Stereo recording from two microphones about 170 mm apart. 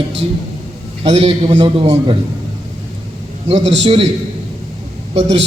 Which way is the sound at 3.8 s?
35° right (ahead or behind).